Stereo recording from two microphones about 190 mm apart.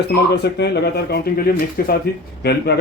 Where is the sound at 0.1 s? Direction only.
60° left (ahead or behind).